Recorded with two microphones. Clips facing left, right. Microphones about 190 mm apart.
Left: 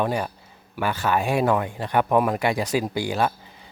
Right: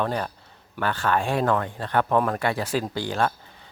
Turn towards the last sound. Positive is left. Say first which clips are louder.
# left 2 dB
turn(degrees=10)  # may be behind; listen again after turning